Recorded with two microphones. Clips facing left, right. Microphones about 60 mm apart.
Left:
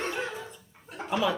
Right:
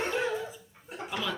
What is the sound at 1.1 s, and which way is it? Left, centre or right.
Speech, centre.